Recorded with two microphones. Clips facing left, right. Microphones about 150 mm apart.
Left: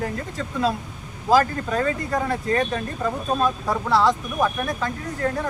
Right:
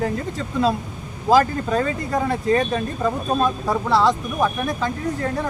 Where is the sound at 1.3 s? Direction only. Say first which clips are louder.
Right 2 dB; 25° right (ahead or behind).